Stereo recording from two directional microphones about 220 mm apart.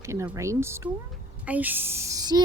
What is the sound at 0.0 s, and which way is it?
A woman's voice, 10° right (ahead or behind).